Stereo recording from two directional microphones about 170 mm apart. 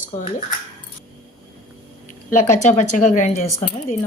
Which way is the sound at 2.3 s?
45° left (ahead or behind).